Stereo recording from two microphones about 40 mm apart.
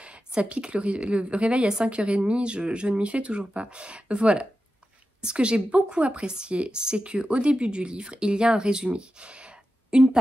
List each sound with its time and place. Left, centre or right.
0.0 s a woman's voice: right